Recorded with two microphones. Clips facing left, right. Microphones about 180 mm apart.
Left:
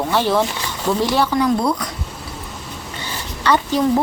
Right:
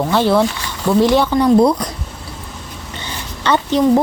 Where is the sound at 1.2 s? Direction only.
30° right (ahead or behind).